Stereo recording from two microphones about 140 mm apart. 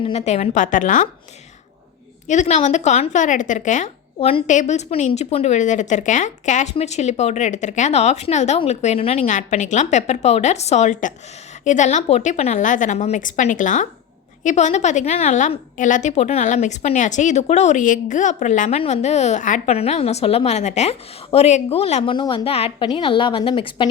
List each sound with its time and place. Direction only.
0.0 s a woman's voice: 50° left (ahead or behind); by 1.0 s 65° left (ahead or behind)
2.2 s a woman's voice: 60° left (ahead or behind)
4.4 s a woman's voice: 60° left (ahead or behind)
19.7 s a woman's voice: 45° left (ahead or behind)
22.0 s a woman's voice: 35° left (ahead or behind)